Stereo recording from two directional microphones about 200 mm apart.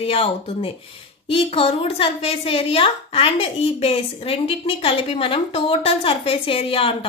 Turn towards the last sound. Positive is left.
turn(degrees=30)  # may be behind; listen again after turning